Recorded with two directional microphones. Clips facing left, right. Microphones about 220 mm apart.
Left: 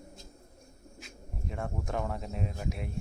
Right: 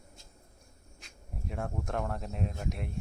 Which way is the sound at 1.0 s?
Centre (ahead or behind).